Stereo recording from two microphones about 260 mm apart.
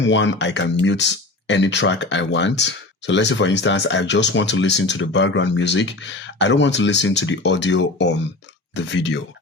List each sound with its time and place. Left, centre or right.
0.0 s speech: left